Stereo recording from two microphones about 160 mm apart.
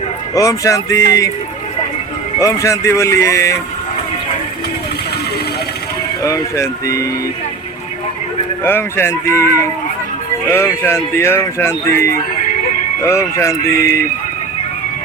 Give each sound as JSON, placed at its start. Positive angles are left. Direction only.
{"t": 0.3, "sound": "speech", "side_deg": 20}
{"t": 2.4, "sound": "speech", "side_deg": 20}
{"t": 6.2, "sound": "speech", "side_deg": 20}
{"t": 8.6, "sound": "speech", "side_deg": 15}